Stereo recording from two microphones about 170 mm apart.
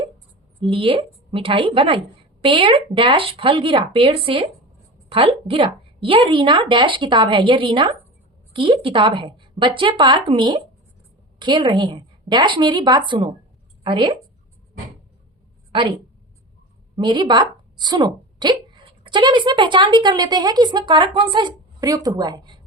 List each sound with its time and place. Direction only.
0.6 s a woman's voice: 30° right (ahead or behind)
15.7 s a woman's voice: 30° right (ahead or behind)